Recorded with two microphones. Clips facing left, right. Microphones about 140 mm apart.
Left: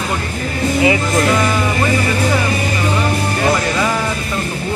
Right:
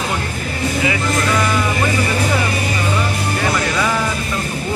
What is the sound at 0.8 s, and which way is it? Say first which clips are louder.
Speech: left 5 dB; 30° left (ahead or behind).